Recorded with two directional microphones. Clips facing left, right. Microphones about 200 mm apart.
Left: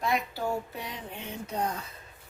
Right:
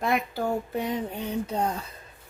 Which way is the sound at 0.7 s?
50° right (ahead or behind).